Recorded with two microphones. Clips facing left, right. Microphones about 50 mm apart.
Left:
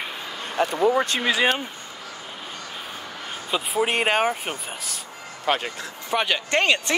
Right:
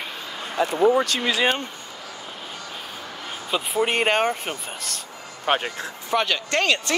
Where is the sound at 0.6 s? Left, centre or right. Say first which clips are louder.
Even; left.